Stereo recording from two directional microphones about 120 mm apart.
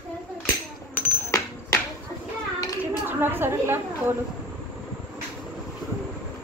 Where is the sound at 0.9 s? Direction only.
15° left (ahead or behind).